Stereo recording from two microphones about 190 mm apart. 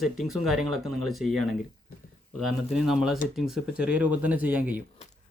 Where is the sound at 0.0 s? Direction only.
Centre (ahead or behind).